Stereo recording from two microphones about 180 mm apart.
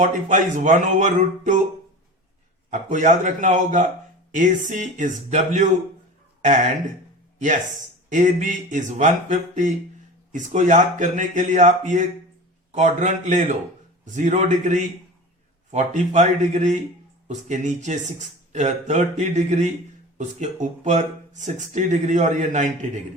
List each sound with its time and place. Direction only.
0.0 s speech: 45° right (ahead or behind)
2.6 s speech: 40° right (ahead or behind)
8.1 s speech: 45° right (ahead or behind)